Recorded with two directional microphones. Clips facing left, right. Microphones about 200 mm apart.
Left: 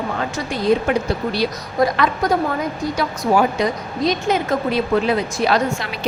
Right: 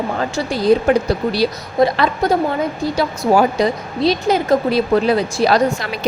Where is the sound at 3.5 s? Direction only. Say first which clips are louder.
Right 3 dB; 30° right (ahead or behind).